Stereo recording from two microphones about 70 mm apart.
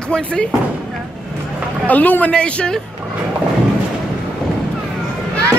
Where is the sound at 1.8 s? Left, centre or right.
Left.